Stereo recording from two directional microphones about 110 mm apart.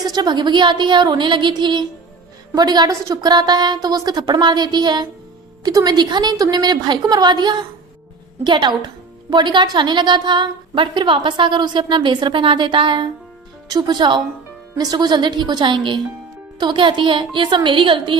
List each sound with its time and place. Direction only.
0.0 s a woman's voice: 40° right (ahead or behind)
13.7 s a woman's voice: 35° right (ahead or behind)